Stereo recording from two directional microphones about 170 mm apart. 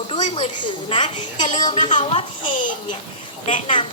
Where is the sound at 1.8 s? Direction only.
45° left (ahead or behind).